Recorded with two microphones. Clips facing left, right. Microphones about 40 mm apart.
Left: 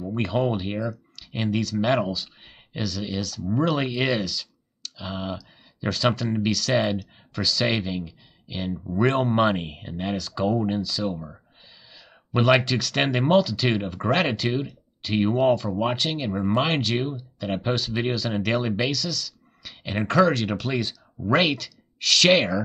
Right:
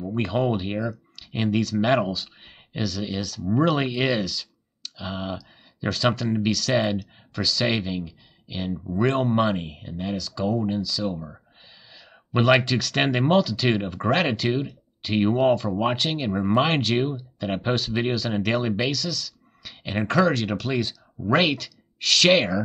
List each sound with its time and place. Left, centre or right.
0.0 s speech: centre
9.3 s speech: centre
10.9 s speech: centre